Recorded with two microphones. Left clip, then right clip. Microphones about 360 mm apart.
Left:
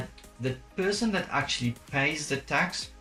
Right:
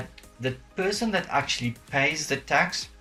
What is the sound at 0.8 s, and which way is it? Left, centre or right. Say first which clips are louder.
Speech: right 2 dB; centre.